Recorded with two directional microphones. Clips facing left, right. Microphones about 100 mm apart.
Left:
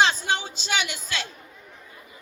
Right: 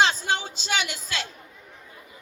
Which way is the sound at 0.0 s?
35° right (ahead or behind).